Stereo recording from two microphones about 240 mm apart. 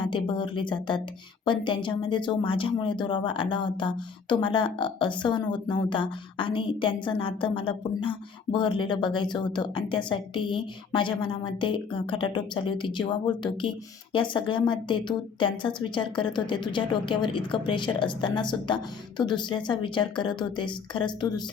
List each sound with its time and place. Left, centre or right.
0.0 s a woman's voice: centre